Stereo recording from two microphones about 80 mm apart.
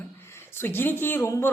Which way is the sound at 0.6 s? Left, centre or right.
Left.